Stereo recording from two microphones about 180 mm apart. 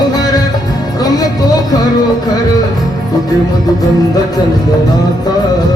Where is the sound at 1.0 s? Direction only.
20° left (ahead or behind).